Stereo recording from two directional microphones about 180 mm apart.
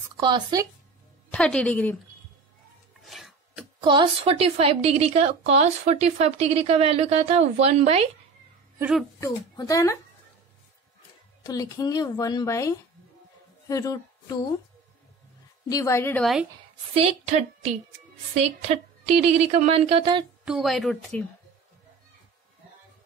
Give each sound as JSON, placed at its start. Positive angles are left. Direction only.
{"t": 0.2, "sound": "speech", "side_deg": -25}
{"t": 1.3, "sound": "a woman's voice", "side_deg": 5}
{"t": 3.0, "sound": "filing", "side_deg": 0}
{"t": 3.8, "sound": "a woman's voice", "side_deg": -25}
{"t": 9.2, "sound": "a woman's voice", "side_deg": 15}
{"t": 11.4, "sound": "a woman's voice", "side_deg": 20}
{"t": 15.7, "sound": "a woman's voice", "side_deg": 15}
{"t": 16.9, "sound": "a woman's voice", "side_deg": -40}
{"t": 20.4, "sound": "a woman's voice", "side_deg": 0}